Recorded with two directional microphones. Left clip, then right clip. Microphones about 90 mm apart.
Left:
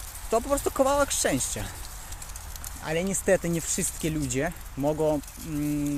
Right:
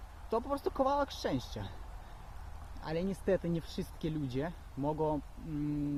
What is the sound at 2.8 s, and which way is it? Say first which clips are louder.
Speech: left 9 dB; 20° right (ahead or behind).